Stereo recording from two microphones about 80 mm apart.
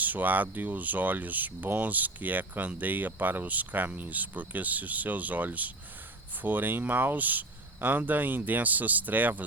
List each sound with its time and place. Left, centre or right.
0.0 s speech: right